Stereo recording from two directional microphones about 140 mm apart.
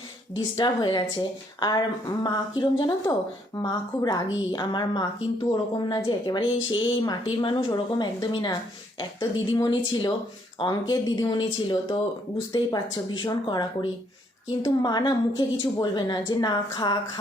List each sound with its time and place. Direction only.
0.3 s speech: 30° left (ahead or behind)
9.6 s speech: 30° left (ahead or behind)